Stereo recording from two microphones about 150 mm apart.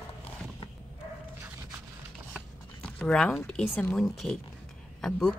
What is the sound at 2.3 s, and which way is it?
Zipper, 5° left (ahead or behind).